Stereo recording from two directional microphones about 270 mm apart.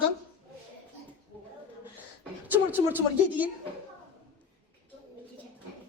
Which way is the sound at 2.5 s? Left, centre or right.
Centre.